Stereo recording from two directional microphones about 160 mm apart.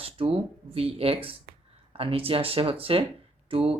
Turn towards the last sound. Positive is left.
turn(degrees=-35)  # may be behind; listen again after turning